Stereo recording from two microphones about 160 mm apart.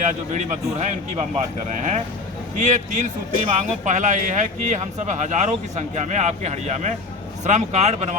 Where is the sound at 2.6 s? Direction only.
50° right (ahead or behind).